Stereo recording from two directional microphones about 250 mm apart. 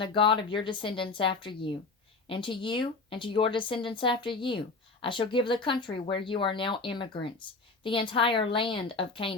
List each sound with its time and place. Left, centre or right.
0.0 s speech: centre